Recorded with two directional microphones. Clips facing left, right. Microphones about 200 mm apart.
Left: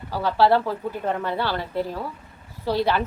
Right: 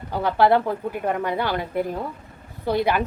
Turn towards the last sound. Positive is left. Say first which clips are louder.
# right 1 dB
turn(degrees=-15)  # may be behind; listen again after turning